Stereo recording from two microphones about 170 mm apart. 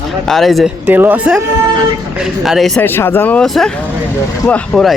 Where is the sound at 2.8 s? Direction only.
15° left (ahead or behind).